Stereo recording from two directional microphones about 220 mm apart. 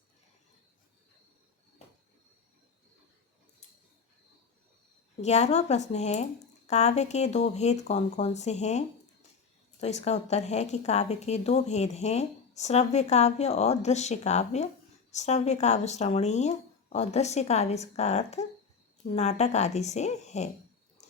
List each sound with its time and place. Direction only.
5.2 s speech: 30° left (ahead or behind)
9.8 s speech: 30° left (ahead or behind)